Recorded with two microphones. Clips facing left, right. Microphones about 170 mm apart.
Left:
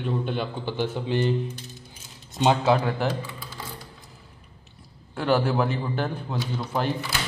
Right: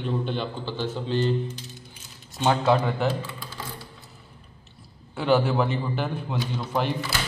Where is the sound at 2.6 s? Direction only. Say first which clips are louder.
Even; 5° left (ahead or behind).